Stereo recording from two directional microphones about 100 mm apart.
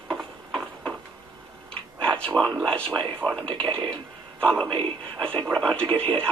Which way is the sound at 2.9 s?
10° left (ahead or behind).